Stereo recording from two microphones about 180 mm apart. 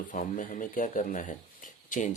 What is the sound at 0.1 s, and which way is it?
Speech, 45° left (ahead or behind).